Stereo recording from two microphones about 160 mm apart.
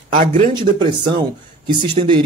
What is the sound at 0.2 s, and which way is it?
Speech, 50° right (ahead or behind).